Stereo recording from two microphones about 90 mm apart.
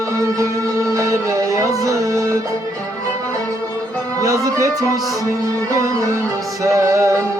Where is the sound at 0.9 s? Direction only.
40° right (ahead or behind).